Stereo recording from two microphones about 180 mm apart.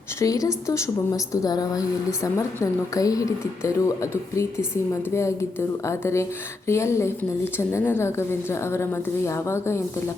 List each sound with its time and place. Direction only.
0.2 s a woman's voice: 20° left (ahead or behind)
5.1 s a woman's voice: 15° left (ahead or behind)